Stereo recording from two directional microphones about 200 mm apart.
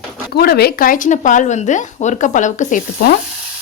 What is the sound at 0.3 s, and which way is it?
Speech, 50° left (ahead or behind).